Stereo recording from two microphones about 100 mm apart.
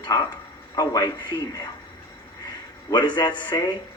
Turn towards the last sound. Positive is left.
turn(degrees=50)  # may be behind; listen again after turning